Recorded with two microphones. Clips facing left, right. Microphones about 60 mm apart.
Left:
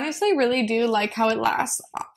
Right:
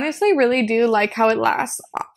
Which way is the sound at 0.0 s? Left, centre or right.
Right.